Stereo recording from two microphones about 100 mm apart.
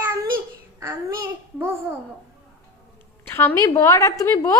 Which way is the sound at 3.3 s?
25° left (ahead or behind).